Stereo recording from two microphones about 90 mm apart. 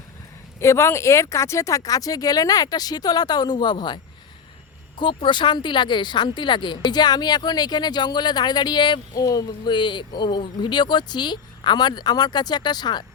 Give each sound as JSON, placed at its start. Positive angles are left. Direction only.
{"t": 0.6, "sound": "speech", "side_deg": 30}
{"t": 9.1, "sound": "speech", "side_deg": 40}